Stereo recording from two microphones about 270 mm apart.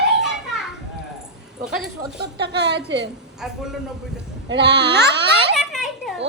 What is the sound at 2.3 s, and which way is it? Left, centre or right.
Speech, right.